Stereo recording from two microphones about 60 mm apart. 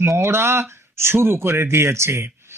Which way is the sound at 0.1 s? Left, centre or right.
Right.